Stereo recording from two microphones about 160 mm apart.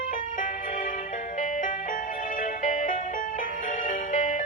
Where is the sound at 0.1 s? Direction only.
55° left (ahead or behind).